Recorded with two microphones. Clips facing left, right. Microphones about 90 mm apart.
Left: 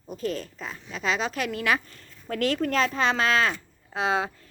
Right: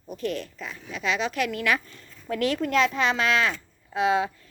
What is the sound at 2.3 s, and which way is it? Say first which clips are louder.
Speech: right 1 dB; 40° left (ahead or behind).